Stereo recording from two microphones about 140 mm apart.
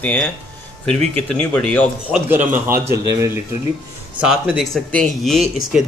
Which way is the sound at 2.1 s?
15° right (ahead or behind).